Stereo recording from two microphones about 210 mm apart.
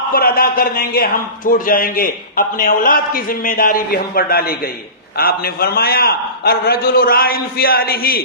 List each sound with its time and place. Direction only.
0.1 s a man's voice: 45° left (ahead or behind)